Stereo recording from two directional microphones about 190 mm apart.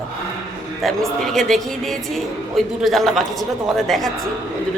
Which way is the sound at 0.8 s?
Centre (ahead or behind).